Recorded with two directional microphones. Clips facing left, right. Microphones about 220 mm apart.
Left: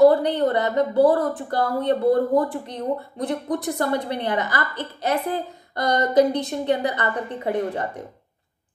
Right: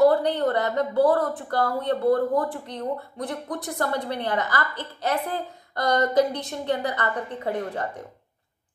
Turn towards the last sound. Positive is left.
turn(degrees=20)  # may be behind; listen again after turning